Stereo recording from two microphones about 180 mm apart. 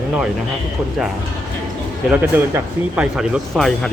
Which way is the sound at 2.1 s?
10° right (ahead or behind).